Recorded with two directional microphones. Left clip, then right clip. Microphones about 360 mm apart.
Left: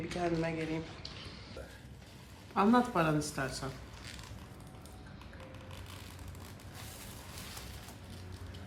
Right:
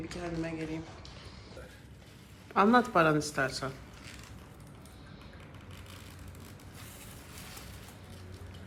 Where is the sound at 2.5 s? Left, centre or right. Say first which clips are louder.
Right 4 dB; centre.